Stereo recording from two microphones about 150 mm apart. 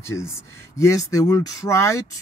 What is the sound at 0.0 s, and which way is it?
Speech, 20° left (ahead or behind).